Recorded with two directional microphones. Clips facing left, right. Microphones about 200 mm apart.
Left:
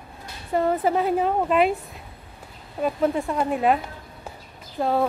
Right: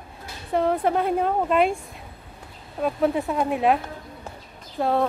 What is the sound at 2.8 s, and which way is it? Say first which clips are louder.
Speech: even; centre (ahead or behind).